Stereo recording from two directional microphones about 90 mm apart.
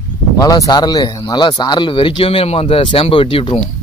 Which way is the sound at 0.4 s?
45° left (ahead or behind).